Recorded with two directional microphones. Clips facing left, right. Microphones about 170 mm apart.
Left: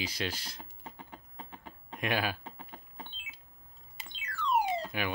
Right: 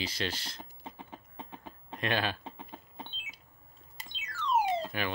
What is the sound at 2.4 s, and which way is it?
Typing, 20° right (ahead or behind).